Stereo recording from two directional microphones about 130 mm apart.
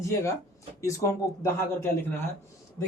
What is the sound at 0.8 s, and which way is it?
Speech, 25° left (ahead or behind).